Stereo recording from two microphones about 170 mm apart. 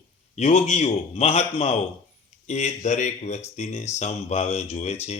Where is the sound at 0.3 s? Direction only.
40° left (ahead or behind).